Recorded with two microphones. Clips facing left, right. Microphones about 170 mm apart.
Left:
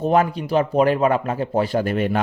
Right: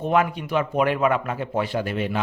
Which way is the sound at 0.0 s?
35° left (ahead or behind).